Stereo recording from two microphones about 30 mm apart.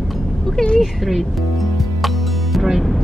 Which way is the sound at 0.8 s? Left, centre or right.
Centre.